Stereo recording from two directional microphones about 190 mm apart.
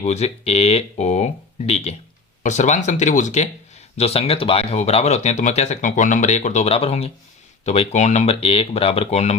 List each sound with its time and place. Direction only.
0.0 s speech: 35° left (ahead or behind)